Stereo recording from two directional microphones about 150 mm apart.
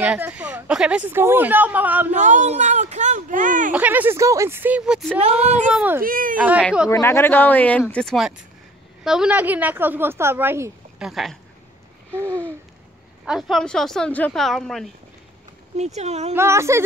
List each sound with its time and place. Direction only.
0.0 s a woman's voice: 10° right (ahead or behind)
2.1 s speech: 55° right (ahead or behind)
3.7 s a woman's voice: 10° right (ahead or behind)
5.2 s speech: 45° right (ahead or behind)
5.8 s a woman's voice: 15° right (ahead or behind)
6.0 s speech: 65° right (ahead or behind)
6.3 s a woman's voice: 10° right (ahead or behind)
6.9 s a woman's voice: 15° left (ahead or behind); by 10.7 s 15° right (ahead or behind)
11.0 s speech: centre (ahead or behind)
12.1 s babbling: 15° right (ahead or behind)
13.2 s speech: centre (ahead or behind)
15.7 s speech: 45° right (ahead or behind)
16.3 s speech: 20° right (ahead or behind)